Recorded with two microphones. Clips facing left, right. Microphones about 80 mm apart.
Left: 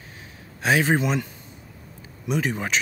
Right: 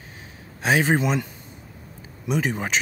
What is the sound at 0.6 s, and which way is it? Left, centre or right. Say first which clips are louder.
Speech: even; centre.